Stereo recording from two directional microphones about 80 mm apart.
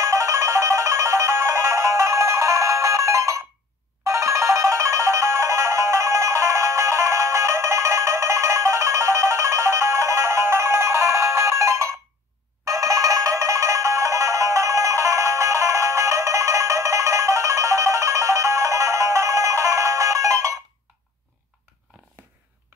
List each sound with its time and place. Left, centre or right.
0.0 s music: right